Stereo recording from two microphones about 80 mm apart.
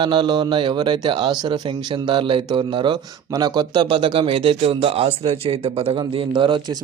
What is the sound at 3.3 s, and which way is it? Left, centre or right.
Speech, right.